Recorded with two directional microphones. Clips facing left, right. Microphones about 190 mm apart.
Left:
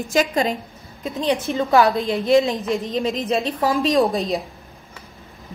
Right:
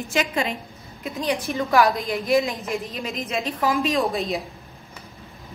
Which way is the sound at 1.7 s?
30° left (ahead or behind).